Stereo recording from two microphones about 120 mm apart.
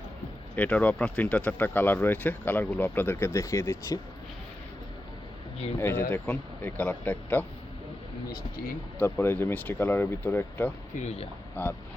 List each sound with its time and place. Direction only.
0.5 s speech: 15° left (ahead or behind)
5.8 s speech: 15° left (ahead or behind)
9.0 s speech: 15° left (ahead or behind)
11.0 s speech: 55° left (ahead or behind)